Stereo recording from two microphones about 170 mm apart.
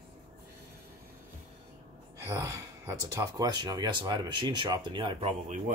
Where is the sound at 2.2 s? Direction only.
20° right (ahead or behind).